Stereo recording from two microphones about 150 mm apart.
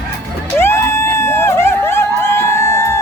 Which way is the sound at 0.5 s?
15° left (ahead or behind).